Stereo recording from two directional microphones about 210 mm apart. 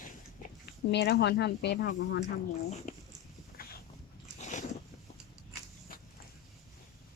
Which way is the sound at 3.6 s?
45° left (ahead or behind).